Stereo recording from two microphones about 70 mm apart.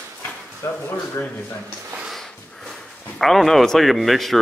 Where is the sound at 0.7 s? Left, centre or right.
Left.